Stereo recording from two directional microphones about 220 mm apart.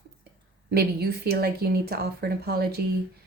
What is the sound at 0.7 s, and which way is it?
Speech, 45° right (ahead or behind).